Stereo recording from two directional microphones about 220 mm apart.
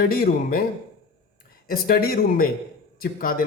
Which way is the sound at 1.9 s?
40° left (ahead or behind).